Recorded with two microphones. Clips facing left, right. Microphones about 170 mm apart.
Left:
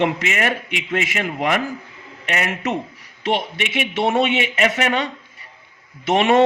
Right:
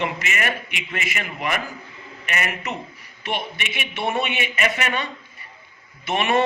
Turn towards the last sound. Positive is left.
turn(degrees=85)